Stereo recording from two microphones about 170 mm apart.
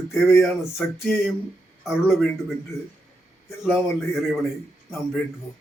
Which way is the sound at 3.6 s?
Centre (ahead or behind).